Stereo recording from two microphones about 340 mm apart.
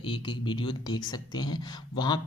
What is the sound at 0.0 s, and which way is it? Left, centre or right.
Speech, centre.